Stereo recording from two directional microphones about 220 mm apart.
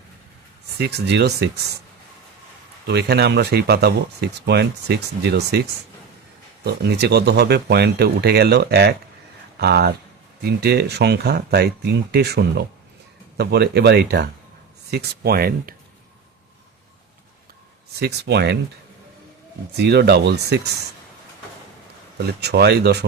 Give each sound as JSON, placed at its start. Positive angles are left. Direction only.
{"t": 0.8, "sound": "speech", "side_deg": -50}
{"t": 2.8, "sound": "speech", "side_deg": -50}
{"t": 6.8, "sound": "speech", "side_deg": -50}
{"t": 18.0, "sound": "speech", "side_deg": -50}
{"t": 19.7, "sound": "speech", "side_deg": -50}
{"t": 22.3, "sound": "speech", "side_deg": -50}